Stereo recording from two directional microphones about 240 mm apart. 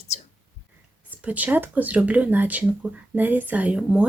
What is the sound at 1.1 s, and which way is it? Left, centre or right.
Speech, centre.